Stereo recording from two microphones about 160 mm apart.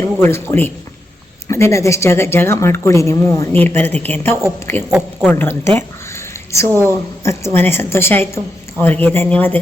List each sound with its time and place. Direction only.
0.2 s a woman's voice: 15° left (ahead or behind)
4.9 s speech: 5° right (ahead or behind)
5.3 s speech: 15° left (ahead or behind)
6.7 s a woman's voice: 15° right (ahead or behind)
7.3 s a woman's voice: 15° left (ahead or behind)